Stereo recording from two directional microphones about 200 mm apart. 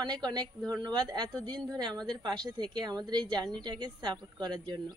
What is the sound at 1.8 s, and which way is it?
A woman's voice, 20° right (ahead or behind).